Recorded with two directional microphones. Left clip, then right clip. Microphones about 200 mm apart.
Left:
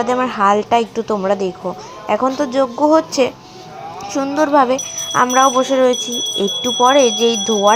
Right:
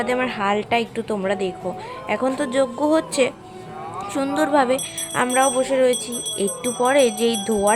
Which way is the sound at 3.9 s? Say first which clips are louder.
Left 4 dB; centre (ahead or behind).